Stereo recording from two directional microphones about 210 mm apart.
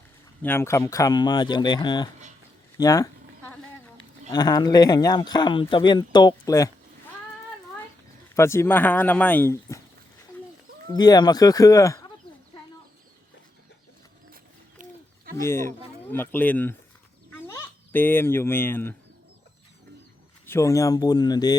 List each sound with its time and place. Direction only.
0.4 s speech: 10° left (ahead or behind)
2.7 s a sound: 15° left (ahead or behind)
4.3 s speech: 20° left (ahead or behind)
8.4 s speech: 10° left (ahead or behind)
10.8 s speech: 20° left (ahead or behind)
14.8 s a sound: 40° right (ahead or behind)
15.4 s a child's voice: 10° left (ahead or behind)
20.5 s speech: 15° left (ahead or behind)